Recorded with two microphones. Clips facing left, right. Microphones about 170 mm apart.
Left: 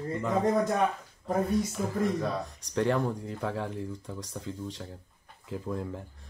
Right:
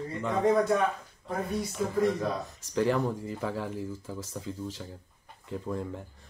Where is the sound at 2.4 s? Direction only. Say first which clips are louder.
Right 1 dB; centre (ahead or behind).